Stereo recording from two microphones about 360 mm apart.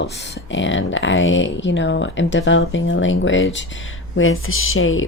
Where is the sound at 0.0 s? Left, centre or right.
Left.